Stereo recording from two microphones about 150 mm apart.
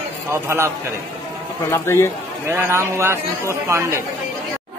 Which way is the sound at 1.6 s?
15° left (ahead or behind).